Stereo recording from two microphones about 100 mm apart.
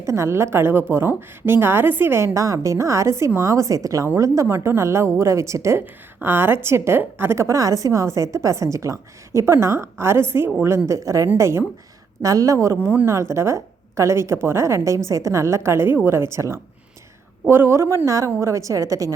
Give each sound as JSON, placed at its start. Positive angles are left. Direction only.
{"t": 0.0, "sound": "a woman's voice", "side_deg": -30}